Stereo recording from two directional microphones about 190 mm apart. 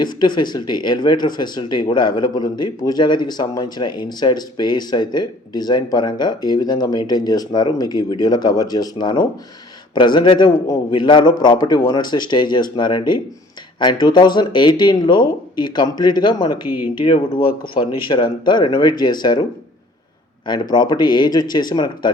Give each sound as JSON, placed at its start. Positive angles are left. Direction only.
{"t": 0.0, "sound": "speech", "side_deg": 25}
{"t": 16.6, "sound": "speech", "side_deg": -10}
{"t": 17.0, "sound": "speech", "side_deg": 25}
{"t": 20.5, "sound": "speech", "side_deg": 20}